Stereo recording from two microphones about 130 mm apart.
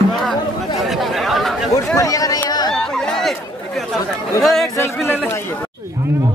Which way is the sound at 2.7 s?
5° left (ahead or behind).